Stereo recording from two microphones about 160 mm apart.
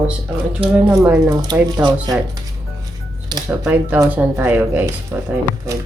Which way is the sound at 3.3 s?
25° right (ahead or behind).